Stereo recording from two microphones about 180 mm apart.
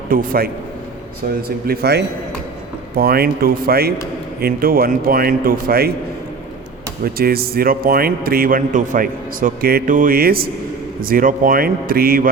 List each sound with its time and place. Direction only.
0.1 s a man's voice: 55° right (ahead or behind)
7.0 s a man's voice: 55° right (ahead or behind)